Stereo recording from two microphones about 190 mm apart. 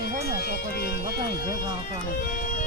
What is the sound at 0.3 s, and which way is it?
Music, 55° left (ahead or behind).